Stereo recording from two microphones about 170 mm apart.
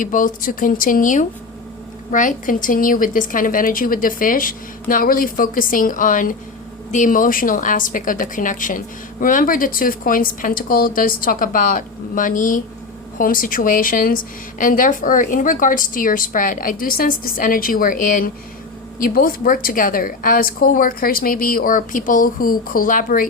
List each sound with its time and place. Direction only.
0.0 s a woman's voice: 50° left (ahead or behind)